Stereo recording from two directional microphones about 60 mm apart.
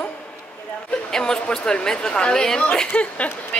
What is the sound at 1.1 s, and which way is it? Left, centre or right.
A woman's voice, centre.